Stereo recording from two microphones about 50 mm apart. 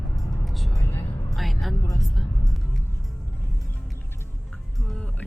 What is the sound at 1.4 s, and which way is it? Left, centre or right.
Music, centre.